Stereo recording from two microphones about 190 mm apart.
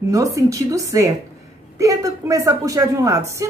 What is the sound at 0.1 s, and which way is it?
A woman's voice, 15° right (ahead or behind).